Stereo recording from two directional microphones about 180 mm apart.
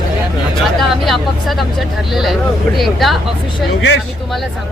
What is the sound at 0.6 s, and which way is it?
Speech, centre (ahead or behind).